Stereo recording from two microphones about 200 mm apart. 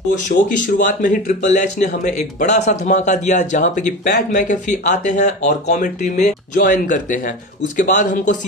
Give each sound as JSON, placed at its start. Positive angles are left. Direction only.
{"t": 0.3, "sound": "speech", "side_deg": 45}